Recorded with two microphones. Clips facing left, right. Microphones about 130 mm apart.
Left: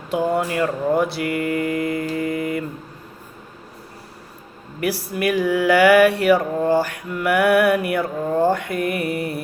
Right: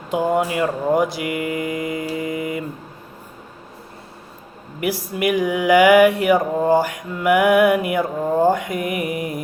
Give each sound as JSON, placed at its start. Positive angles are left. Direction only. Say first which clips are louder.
{"t": 0.1, "sound": "mantra", "louder": "right 1 dB", "side_deg": -20}
{"t": 5.1, "sound": "mantra", "louder": "even", "side_deg": -20}